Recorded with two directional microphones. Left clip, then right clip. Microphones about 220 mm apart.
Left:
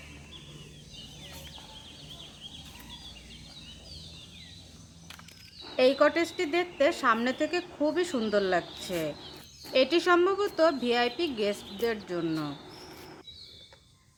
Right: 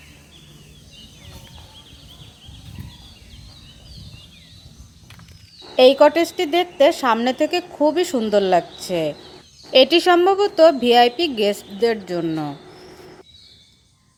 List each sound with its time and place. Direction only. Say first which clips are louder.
5.7 s a woman's voice: right 11 dB; 20° right (ahead or behind)